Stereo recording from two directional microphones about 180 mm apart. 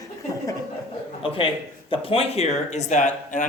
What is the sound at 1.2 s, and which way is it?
Speech, 30° left (ahead or behind).